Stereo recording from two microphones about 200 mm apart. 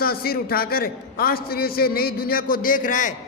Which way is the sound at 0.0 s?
50° left (ahead or behind).